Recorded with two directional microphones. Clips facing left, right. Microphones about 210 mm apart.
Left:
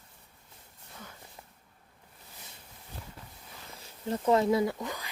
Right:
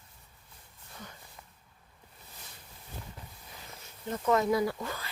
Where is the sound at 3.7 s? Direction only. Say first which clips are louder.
Left 3 dB; 30° left (ahead or behind).